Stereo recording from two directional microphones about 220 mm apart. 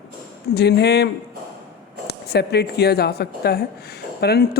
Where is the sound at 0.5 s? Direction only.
50° left (ahead or behind).